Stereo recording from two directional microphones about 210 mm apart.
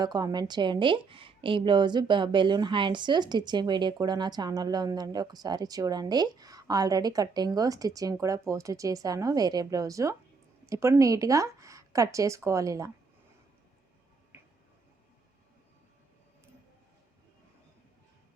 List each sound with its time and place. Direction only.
0.0 s a woman's voice: 20° right (ahead or behind)